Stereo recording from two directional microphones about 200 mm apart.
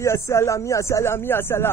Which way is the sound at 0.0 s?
15° left (ahead or behind).